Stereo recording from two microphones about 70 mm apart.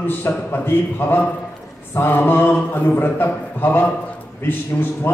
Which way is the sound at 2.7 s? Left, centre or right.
Left.